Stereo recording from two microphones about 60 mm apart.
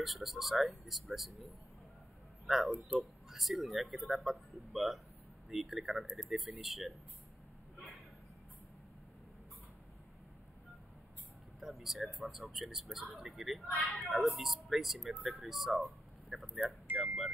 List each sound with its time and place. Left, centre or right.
0.0 s speech: centre
2.4 s speech: centre
11.6 s speech: centre
16.8 s a sound: right